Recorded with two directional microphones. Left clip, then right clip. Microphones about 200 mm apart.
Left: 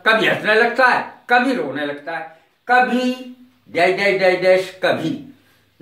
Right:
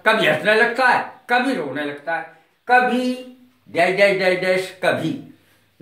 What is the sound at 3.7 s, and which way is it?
Speech, 20° right (ahead or behind).